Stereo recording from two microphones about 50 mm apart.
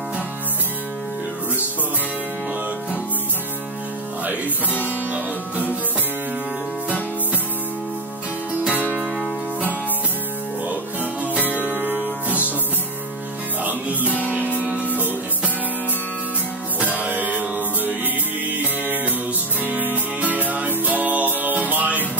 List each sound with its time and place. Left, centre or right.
5.1 s music: right
8.7 s music: right
11.6 s music: right
13.7 s music: right
16.8 s music: right